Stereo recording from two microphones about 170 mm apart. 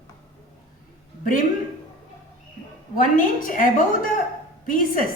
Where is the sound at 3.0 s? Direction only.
55° left (ahead or behind).